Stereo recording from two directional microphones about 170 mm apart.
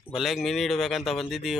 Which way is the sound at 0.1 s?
Centre (ahead or behind).